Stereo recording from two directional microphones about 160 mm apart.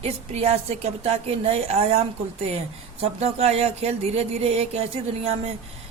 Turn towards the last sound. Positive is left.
turn(degrees=-40)  # may be behind; listen again after turning